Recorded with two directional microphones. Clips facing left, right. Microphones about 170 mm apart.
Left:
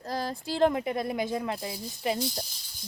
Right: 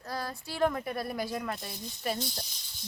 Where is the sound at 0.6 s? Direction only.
20° left (ahead or behind).